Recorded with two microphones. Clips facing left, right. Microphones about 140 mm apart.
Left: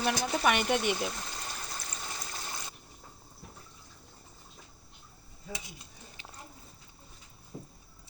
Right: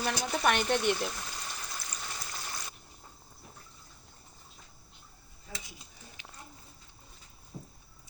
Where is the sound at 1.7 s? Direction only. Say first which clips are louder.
Left 1 dB; 20° left (ahead or behind).